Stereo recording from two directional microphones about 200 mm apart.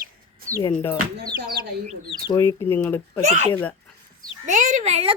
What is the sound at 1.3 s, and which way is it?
Speech, 50° right (ahead or behind).